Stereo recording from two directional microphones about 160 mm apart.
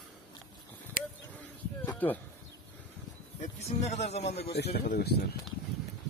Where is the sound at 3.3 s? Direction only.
45° left (ahead or behind).